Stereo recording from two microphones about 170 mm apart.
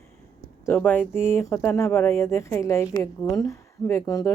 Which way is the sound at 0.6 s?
10° left (ahead or behind).